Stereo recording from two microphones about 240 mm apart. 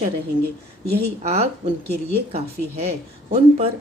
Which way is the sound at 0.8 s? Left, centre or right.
Right.